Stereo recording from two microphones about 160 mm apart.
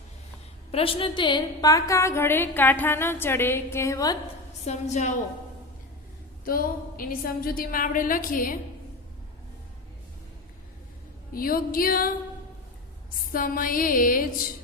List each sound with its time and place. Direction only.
0.7 s a woman's voice: 35° left (ahead or behind)
4.6 s a woman's voice: 45° left (ahead or behind)
6.4 s a woman's voice: 65° left (ahead or behind)
11.3 s a woman's voice: 65° left (ahead or behind)
13.3 s a woman's voice: 60° left (ahead or behind)